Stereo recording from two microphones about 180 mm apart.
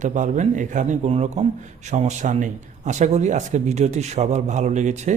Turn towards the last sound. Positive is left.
turn(degrees=-40)  # may be behind; listen again after turning